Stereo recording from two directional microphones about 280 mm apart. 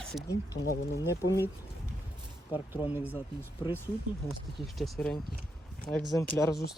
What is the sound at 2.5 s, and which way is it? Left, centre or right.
Speech, centre.